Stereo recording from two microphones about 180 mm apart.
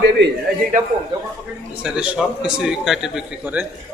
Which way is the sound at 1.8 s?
5° right (ahead or behind).